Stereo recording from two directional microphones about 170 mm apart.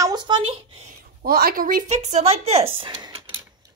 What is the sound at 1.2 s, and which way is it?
Speech, 60° right (ahead or behind).